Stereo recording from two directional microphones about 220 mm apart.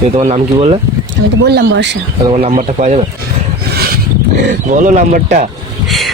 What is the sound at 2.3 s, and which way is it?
Speech, 30° right (ahead or behind).